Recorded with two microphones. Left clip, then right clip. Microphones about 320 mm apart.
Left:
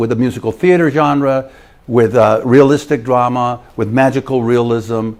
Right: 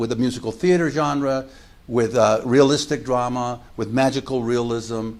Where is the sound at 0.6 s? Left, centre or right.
Left.